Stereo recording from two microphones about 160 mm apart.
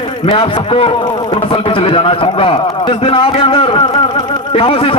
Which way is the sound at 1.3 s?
35° left (ahead or behind).